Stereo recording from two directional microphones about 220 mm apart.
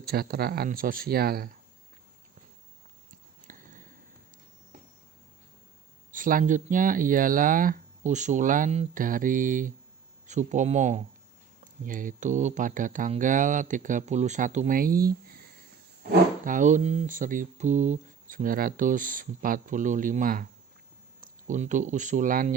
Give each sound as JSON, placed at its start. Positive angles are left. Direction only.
{"t": 0.0, "sound": "speech", "side_deg": -45}
{"t": 3.4, "sound": "a sound", "side_deg": -35}
{"t": 6.1, "sound": "speech", "side_deg": -40}